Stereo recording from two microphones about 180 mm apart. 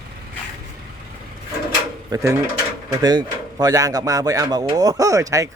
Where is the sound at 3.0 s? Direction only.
20° right (ahead or behind).